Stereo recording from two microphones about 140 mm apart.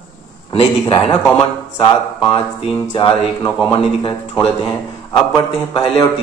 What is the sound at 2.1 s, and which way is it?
A man's voice, 35° left (ahead or behind).